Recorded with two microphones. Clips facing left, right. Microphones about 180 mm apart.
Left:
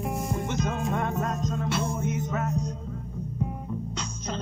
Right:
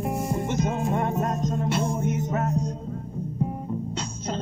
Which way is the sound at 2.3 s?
35° right (ahead or behind).